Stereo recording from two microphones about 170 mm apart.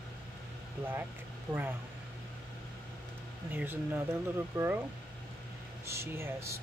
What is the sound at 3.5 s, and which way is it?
Speech, 10° right (ahead or behind).